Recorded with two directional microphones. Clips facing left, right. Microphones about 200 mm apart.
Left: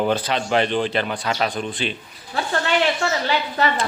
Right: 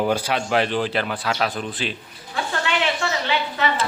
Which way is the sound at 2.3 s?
40° left (ahead or behind).